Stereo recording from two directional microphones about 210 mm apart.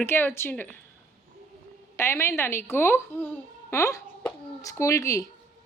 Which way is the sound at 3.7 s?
15° left (ahead or behind).